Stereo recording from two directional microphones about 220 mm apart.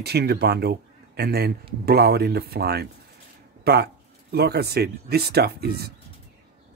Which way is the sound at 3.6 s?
45° right (ahead or behind).